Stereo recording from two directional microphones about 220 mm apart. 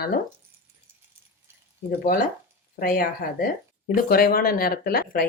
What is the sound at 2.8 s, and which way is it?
Speech, 40° left (ahead or behind).